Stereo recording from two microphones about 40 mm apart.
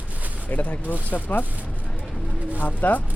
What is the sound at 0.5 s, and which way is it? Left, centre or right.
Speech, left.